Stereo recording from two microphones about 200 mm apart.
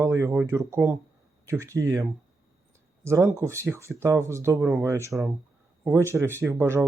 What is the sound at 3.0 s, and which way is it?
Speech, 15° right (ahead or behind).